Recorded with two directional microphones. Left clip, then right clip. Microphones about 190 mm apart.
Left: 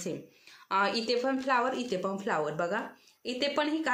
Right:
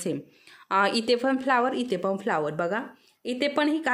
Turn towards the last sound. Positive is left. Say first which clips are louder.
# right 4 dB
turn(degrees=-45)  # may be behind; listen again after turning